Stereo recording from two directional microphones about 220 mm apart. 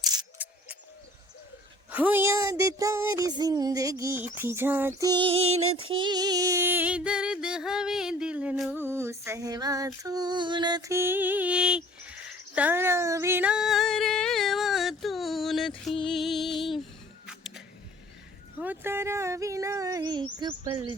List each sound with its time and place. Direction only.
0.0 s single-lens reflex camera: 15° right (ahead or behind)
1.9 s music: 5° right (ahead or behind); by 5.5 s 25° right (ahead or behind)
5.6 s female singing: 70° right (ahead or behind)
5.9 s music: 20° right (ahead or behind); by 16.8 s centre (ahead or behind)
17.2 s a sound: centre (ahead or behind)
18.6 s music: 10° right (ahead or behind)